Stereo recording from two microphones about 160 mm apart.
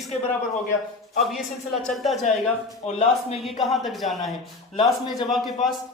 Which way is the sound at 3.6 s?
Centre (ahead or behind).